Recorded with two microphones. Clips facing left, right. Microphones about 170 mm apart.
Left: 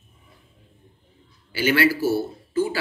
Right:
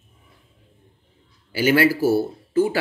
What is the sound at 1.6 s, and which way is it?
Speech, 45° right (ahead or behind).